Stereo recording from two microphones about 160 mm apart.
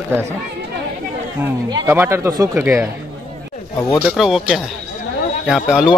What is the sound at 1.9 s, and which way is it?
Speech, 15° right (ahead or behind).